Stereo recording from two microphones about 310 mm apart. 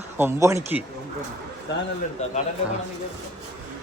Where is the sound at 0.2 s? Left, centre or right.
Centre.